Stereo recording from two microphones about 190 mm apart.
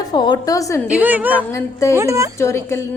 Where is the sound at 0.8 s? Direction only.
5° right (ahead or behind).